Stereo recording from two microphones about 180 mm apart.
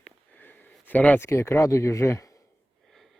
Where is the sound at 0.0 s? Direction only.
10° left (ahead or behind).